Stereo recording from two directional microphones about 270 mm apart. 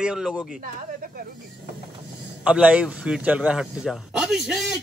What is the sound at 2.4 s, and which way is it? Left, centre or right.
A man's voice, centre.